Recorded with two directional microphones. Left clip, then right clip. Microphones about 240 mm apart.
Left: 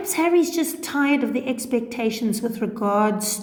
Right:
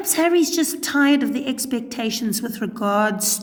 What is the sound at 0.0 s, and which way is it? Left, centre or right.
A woman's voice, right.